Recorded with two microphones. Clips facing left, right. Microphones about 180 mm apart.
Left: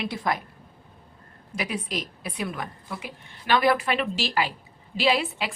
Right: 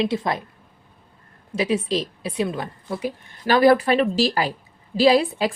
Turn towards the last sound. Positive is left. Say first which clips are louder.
# right 8 dB
turn(degrees=-40)  # may be behind; listen again after turning